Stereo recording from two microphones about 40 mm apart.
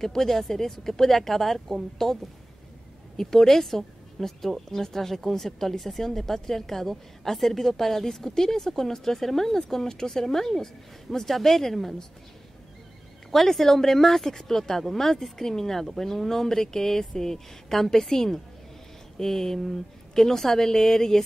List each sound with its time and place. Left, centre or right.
0.0 s speech: centre
3.2 s speech: centre
13.3 s speech: centre